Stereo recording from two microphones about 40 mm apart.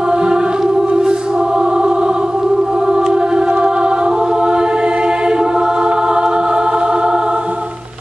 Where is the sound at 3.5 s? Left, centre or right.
Right.